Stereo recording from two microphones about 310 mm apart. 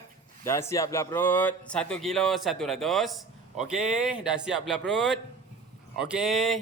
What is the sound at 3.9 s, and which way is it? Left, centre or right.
Speech, centre.